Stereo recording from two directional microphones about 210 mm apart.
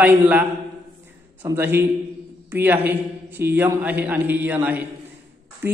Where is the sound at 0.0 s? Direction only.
5° right (ahead or behind).